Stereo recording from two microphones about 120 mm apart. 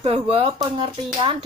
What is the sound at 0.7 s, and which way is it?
Speech, 40° right (ahead or behind).